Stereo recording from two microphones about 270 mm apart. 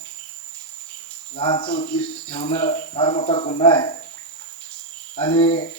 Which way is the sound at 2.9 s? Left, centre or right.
Centre.